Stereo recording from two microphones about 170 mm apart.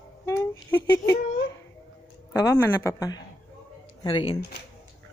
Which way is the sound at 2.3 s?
15° left (ahead or behind).